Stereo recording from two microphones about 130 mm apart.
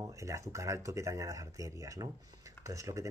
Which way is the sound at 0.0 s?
25° right (ahead or behind).